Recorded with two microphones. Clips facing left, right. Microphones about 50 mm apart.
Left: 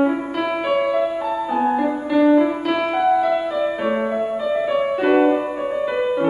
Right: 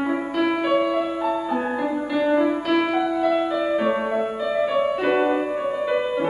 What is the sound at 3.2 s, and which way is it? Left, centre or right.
Music, centre.